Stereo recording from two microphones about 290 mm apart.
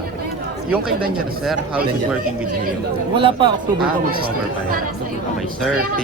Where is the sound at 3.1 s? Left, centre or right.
Centre.